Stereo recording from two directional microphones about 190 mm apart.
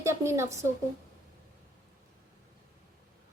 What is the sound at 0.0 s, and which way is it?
Speech, 15° right (ahead or behind).